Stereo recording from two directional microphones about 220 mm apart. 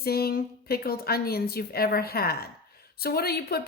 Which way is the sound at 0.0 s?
45° left (ahead or behind).